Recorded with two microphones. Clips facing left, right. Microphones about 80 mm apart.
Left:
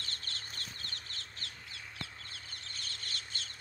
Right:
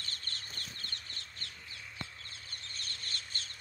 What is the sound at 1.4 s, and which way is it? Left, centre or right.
Crow, left.